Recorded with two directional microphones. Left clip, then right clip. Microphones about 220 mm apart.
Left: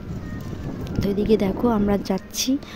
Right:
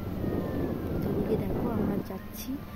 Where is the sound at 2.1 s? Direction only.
40° left (ahead or behind).